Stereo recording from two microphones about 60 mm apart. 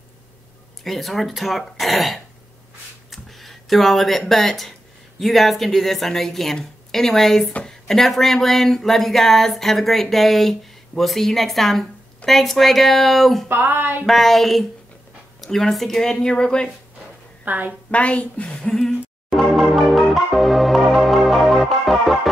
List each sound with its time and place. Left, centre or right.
0.8 s speech: centre
3.1 s a sound: centre
4.3 s speech: centre
13.5 s a sound: right
14.0 s speech: centre
17.5 s a woman's voice: right
17.9 s a woman's voice: left
18.5 s speech: centre
19.3 s music: centre